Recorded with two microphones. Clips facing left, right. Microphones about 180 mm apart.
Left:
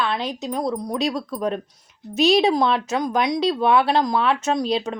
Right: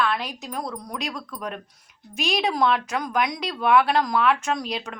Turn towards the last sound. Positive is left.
turn(degrees=30)  # may be behind; listen again after turning